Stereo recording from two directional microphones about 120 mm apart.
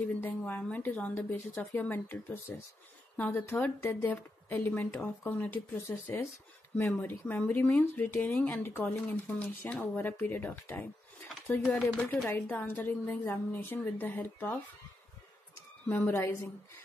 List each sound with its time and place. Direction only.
0.0 s speech: 15° left (ahead or behind)
11.9 s speech: 10° left (ahead or behind)
15.9 s a woman's voice: 20° left (ahead or behind)